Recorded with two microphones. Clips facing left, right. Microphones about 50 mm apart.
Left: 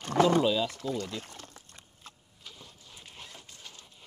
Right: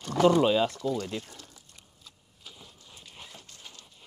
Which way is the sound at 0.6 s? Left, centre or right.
Left.